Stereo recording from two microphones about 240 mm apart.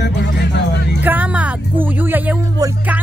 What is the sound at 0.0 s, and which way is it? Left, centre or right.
Music, left.